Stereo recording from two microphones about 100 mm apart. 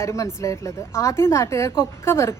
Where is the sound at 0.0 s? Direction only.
30° left (ahead or behind).